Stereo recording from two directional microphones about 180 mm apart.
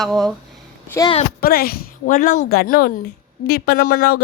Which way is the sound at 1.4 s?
55° left (ahead or behind).